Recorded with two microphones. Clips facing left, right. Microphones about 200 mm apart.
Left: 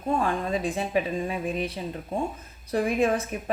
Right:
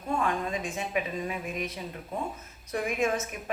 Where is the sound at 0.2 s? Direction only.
35° left (ahead or behind).